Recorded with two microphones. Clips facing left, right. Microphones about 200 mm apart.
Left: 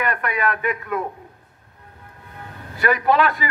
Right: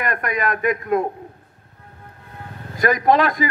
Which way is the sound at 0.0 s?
40° right (ahead or behind).